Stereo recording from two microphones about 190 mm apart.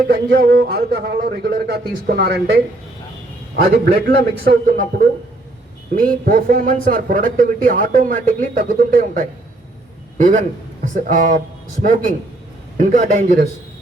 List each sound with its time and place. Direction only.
0.1 s a man's voice: 55° right (ahead or behind)